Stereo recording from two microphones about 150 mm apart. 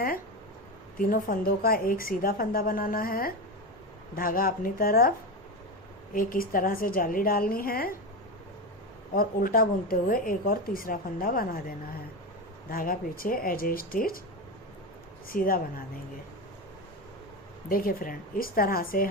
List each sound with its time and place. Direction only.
0.9 s a woman's voice: 70° left (ahead or behind)
6.1 s a woman's voice: 70° left (ahead or behind)
9.1 s a woman's voice: 75° left (ahead or behind)
12.7 s a woman's voice: 70° left (ahead or behind)
15.3 s a woman's voice: 70° left (ahead or behind)
17.7 s a woman's voice: 70° left (ahead or behind)